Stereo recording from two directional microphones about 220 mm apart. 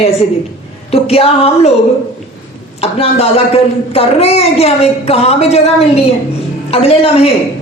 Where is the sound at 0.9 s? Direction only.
25° left (ahead or behind).